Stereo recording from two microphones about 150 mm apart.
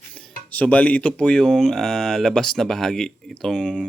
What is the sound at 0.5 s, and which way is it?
Speech, 10° left (ahead or behind).